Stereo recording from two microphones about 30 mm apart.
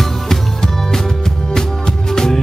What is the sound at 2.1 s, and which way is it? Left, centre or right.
Music, centre.